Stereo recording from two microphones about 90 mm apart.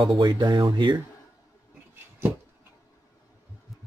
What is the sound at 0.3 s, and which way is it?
Speech, 50° right (ahead or behind).